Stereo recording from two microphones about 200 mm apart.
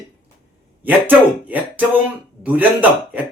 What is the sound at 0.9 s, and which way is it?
Speech, 10° right (ahead or behind).